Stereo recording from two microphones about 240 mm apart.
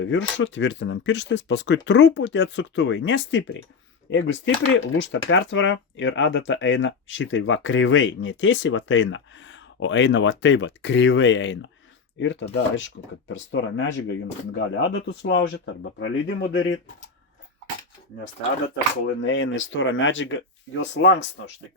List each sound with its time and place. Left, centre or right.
0.0 s speech: left
19.2 s speech: left